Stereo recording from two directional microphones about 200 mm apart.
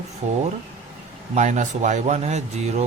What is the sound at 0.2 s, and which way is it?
Speech, 35° right (ahead or behind).